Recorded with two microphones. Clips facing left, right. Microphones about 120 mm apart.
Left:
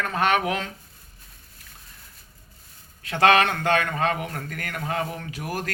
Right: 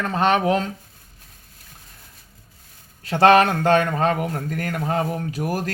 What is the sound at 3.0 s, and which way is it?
Speech, 35° right (ahead or behind).